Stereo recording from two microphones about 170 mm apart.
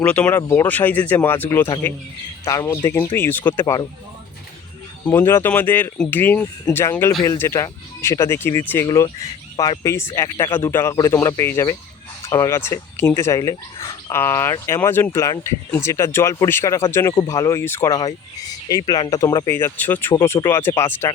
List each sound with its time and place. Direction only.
0.0 s speech: 10° left (ahead or behind)
5.0 s speech: 15° left (ahead or behind)